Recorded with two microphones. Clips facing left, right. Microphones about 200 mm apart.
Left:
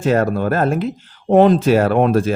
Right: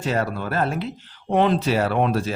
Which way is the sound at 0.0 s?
50° left (ahead or behind).